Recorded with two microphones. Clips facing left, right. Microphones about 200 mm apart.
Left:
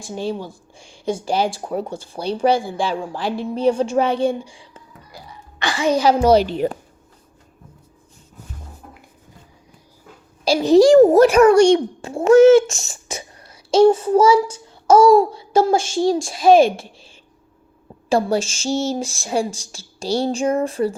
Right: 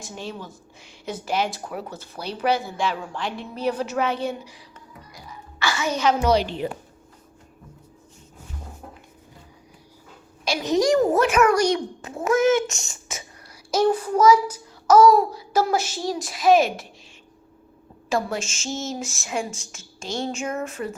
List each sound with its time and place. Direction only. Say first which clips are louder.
0.0 s a child's voice: left 9 dB; 30° left (ahead or behind)
10.4 s a child's voice: left 9 dB; 30° left (ahead or behind)
18.1 s a child's voice: left 7 dB; 35° left (ahead or behind)